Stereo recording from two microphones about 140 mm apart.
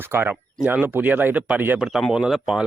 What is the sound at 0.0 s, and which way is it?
Speech, 15° right (ahead or behind).